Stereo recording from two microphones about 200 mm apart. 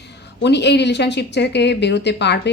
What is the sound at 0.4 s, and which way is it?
Speech, 60° left (ahead or behind).